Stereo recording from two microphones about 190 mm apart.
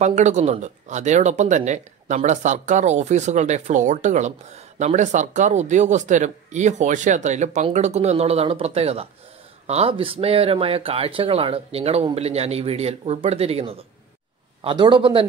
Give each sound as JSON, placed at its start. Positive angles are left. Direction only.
{"t": 0.0, "sound": "a man's voice", "side_deg": -40}